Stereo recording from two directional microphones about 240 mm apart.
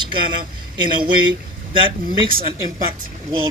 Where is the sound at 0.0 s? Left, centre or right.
Centre.